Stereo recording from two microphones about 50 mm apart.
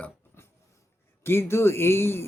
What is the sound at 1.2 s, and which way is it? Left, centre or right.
A man's voice, left.